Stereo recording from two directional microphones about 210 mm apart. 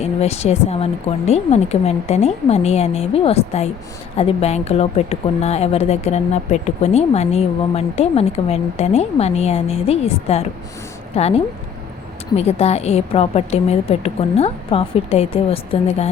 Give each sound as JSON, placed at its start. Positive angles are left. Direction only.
{"t": 0.0, "sound": "a woman's voice", "side_deg": 30}
{"t": 12.4, "sound": "a woman's voice", "side_deg": 30}